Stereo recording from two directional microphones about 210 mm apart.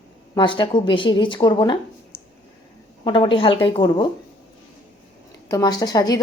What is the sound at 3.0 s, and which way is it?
Speech, 25° left (ahead or behind).